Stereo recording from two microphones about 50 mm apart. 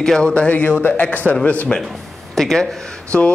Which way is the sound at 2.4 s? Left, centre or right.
Centre.